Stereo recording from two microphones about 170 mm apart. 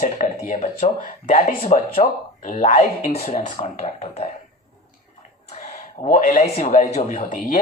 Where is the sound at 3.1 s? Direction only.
35° left (ahead or behind).